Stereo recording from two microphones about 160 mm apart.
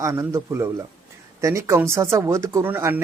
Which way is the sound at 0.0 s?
20° right (ahead or behind).